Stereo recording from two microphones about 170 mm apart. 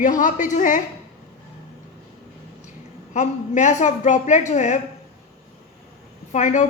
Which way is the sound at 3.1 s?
45° left (ahead or behind).